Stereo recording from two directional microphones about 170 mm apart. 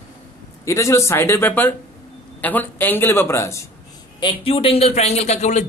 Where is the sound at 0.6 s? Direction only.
15° left (ahead or behind).